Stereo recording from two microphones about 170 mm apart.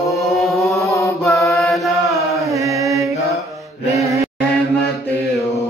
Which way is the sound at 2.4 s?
20° right (ahead or behind).